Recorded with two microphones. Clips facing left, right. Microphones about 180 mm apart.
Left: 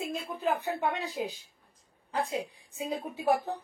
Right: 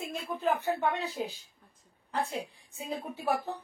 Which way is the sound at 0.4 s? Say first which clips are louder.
Right 1 dB; 15° left (ahead or behind).